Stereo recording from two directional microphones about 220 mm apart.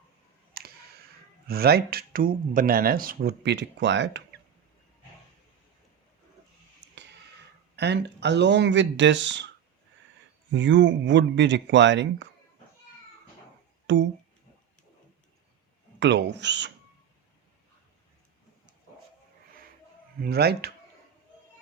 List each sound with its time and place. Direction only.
0.6 s clicking: 45° right (ahead or behind)
1.5 s speech: 45° right (ahead or behind)
7.8 s speech: 50° right (ahead or behind)
10.5 s speech: 55° right (ahead or behind)
13.8 s speech: 55° right (ahead or behind)
16.0 s speech: 55° right (ahead or behind)
20.1 s speech: 45° right (ahead or behind)